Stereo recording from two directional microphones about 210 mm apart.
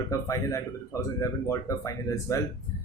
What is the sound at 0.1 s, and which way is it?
Speech, 15° left (ahead or behind).